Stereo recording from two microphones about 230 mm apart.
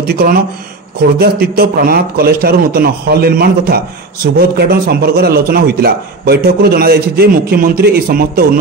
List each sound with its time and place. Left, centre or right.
0.0 s a man's voice: right